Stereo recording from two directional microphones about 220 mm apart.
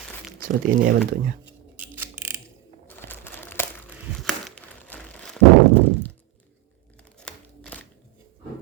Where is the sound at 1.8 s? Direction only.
10° right (ahead or behind).